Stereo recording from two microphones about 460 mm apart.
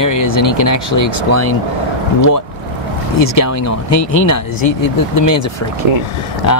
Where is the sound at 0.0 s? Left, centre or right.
Left.